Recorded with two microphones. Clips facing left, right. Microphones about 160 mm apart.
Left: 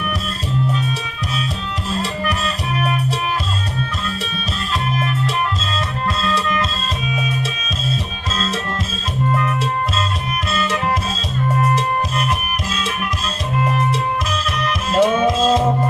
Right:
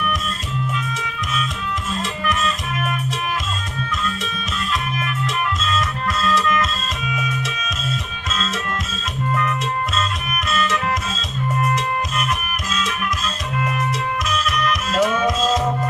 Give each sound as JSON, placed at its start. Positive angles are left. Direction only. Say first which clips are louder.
{"t": 2.2, "sound": "music", "louder": "even", "side_deg": 35}
{"t": 4.0, "sound": "music", "louder": "left 1 dB", "side_deg": 35}
{"t": 6.2, "sound": "music", "louder": "right 3 dB", "side_deg": 30}
{"t": 10.3, "sound": "music", "louder": "right 1 dB", "side_deg": 30}
{"t": 14.3, "sound": "music", "louder": "right 1 dB", "side_deg": 30}